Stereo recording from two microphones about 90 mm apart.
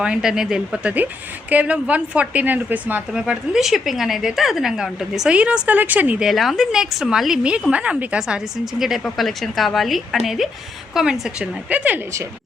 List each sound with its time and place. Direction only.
0.0 s a woman's voice: 10° right (ahead or behind)
6.2 s a woman's voice: centre (ahead or behind); by 11.9 s 15° right (ahead or behind)